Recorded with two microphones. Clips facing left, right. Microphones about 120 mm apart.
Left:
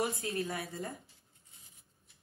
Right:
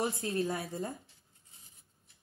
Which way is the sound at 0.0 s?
25° right (ahead or behind).